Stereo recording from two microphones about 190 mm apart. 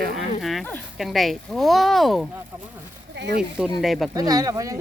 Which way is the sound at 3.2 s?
65° right (ahead or behind).